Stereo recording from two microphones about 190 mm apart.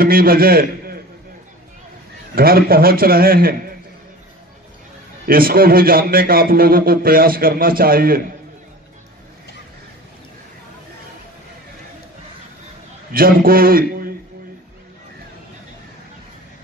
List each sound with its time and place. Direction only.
0.0 s a man's voice: 50° right (ahead or behind)
2.3 s a man's voice: 50° right (ahead or behind)
5.2 s a man's voice: 50° right (ahead or behind)
13.1 s a man's voice: 50° right (ahead or behind)